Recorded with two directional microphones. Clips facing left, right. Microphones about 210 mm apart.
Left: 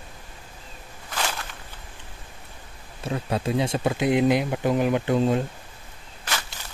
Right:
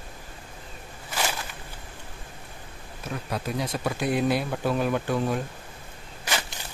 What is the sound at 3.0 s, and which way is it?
Speech, 25° left (ahead or behind).